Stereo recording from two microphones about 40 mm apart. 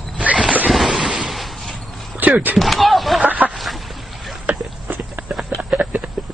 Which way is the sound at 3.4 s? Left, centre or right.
Right.